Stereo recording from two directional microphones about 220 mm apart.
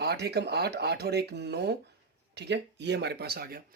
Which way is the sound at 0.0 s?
50° right (ahead or behind).